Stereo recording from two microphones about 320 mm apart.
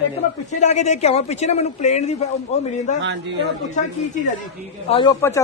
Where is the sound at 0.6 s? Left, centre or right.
Left.